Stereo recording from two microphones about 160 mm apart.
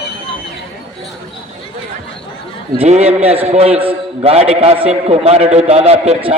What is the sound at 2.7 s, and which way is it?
A man's voice, 40° right (ahead or behind).